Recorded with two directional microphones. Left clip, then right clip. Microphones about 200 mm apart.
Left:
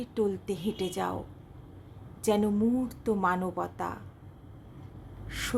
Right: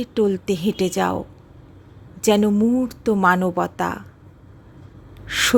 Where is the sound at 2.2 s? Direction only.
25° right (ahead or behind).